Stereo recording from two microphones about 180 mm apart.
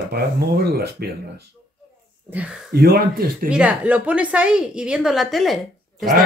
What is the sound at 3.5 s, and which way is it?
A woman's voice, 5° right (ahead or behind).